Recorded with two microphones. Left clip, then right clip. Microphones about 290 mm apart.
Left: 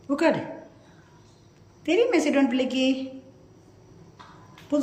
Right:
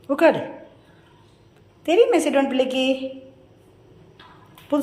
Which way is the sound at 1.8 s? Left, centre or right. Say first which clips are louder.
Right 5 dB; centre.